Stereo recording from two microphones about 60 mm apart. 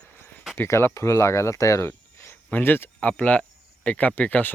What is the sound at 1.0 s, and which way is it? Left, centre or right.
Speech, left.